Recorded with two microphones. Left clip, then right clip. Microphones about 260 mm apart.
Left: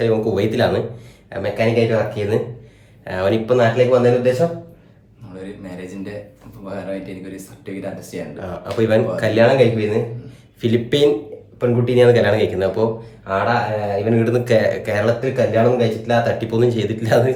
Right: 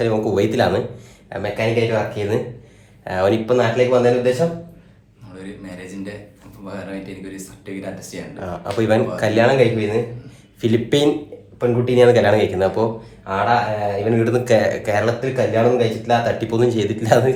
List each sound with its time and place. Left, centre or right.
0.0 s speech: centre
5.4 s a sound: centre
6.7 s speech: centre
8.4 s speech: centre